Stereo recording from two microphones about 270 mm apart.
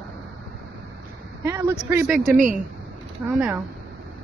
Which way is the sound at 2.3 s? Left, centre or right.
Right.